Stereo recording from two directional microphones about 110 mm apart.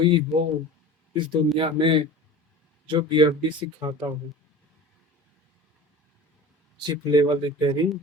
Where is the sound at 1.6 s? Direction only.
50° right (ahead or behind).